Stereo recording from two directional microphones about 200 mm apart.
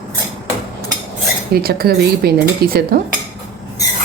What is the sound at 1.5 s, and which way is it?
Speech, 50° right (ahead or behind).